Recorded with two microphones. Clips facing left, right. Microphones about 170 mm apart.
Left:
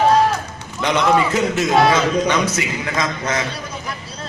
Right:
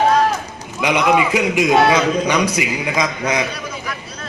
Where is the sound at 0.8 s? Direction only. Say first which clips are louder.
Right 1 dB; 10° right (ahead or behind).